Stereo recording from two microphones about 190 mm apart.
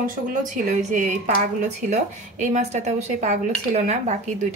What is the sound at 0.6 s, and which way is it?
Speech, 40° right (ahead or behind).